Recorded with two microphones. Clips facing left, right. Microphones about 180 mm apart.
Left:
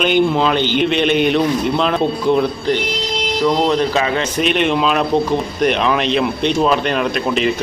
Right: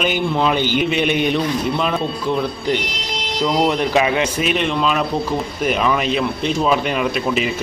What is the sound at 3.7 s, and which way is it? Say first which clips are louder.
A man's voice: left 1 dB; 15° right (ahead or behind).